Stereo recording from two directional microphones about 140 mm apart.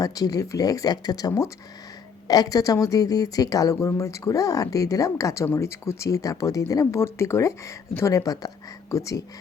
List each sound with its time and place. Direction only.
0.0 s speech: 25° left (ahead or behind)